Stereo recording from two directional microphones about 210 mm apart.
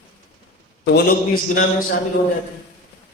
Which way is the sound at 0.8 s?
50° left (ahead or behind).